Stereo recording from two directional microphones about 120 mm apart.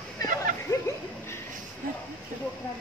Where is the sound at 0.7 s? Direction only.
30° left (ahead or behind).